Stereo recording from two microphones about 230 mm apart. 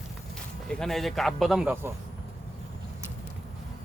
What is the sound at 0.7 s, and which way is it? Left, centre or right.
Speech, centre.